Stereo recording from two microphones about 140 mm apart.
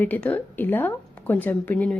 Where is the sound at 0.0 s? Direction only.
10° left (ahead or behind).